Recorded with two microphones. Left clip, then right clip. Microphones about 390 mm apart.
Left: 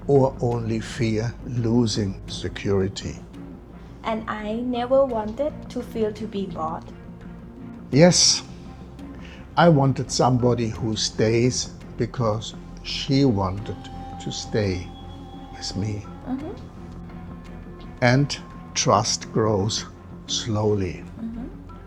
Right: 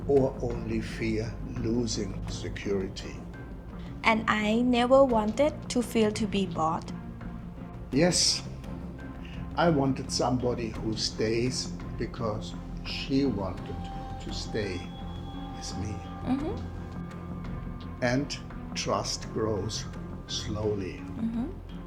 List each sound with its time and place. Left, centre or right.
0.2 s speech: left
4.0 s a woman's voice: centre
7.9 s speech: left
9.6 s speech: left
16.3 s a woman's voice: right
18.0 s speech: left